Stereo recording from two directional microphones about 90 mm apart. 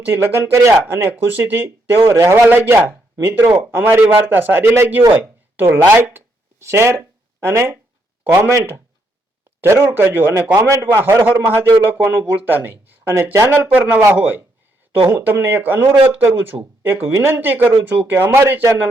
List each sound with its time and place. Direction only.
0.2 s speech: 30° right (ahead or behind)
13.7 s speech: 20° right (ahead or behind)